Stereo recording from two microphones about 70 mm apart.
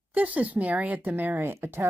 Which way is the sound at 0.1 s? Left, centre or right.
Right.